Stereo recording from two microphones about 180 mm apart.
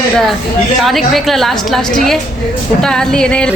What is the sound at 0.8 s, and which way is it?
Speech, centre (ahead or behind).